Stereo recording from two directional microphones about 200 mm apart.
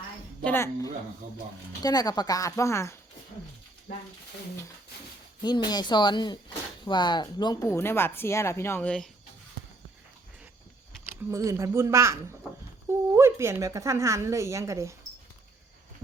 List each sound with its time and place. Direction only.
0.4 s speech: 10° left (ahead or behind)
5.4 s speech: 20° left (ahead or behind)
11.3 s a woman's voice: 15° right (ahead or behind)